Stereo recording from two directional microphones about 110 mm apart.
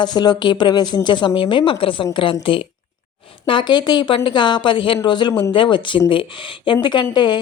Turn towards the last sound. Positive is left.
turn(degrees=45)  # may be behind; listen again after turning